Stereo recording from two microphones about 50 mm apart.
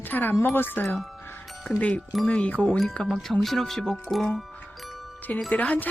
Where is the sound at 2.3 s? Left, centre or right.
Left.